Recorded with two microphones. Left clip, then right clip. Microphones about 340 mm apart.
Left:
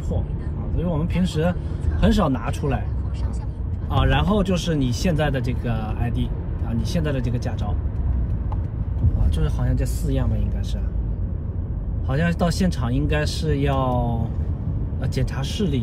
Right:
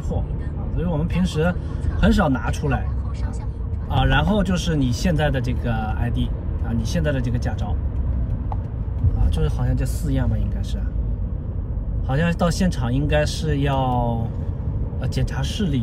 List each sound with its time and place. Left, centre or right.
0.7 s speech: centre
3.9 s speech: centre
9.3 s speech: centre
12.1 s speech: centre
15.3 s speech: centre